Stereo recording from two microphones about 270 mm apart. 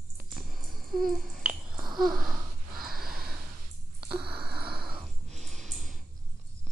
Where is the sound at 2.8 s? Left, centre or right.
Centre.